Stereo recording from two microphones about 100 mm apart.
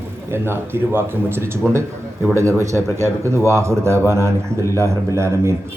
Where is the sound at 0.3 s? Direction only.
25° right (ahead or behind).